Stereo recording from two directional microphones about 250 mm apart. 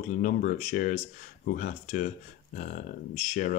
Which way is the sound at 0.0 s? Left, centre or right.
Left.